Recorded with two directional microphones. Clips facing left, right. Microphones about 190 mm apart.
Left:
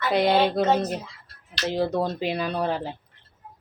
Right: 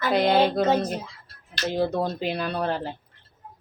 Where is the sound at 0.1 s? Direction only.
Centre (ahead or behind).